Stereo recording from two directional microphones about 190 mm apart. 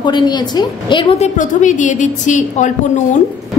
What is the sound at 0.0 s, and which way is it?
A woman's voice, 25° left (ahead or behind).